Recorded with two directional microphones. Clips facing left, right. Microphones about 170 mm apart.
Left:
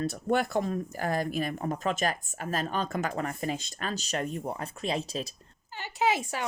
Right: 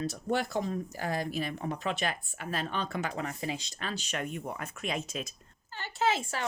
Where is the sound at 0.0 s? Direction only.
55° left (ahead or behind); by 5.3 s 35° left (ahead or behind).